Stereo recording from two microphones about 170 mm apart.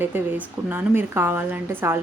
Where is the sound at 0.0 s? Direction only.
10° right (ahead or behind).